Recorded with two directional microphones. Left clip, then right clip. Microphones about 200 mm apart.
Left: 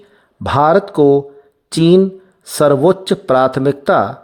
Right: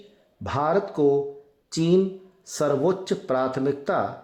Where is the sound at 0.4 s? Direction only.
45° left (ahead or behind).